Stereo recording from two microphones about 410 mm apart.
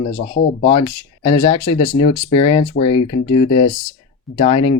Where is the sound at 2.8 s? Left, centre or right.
Left.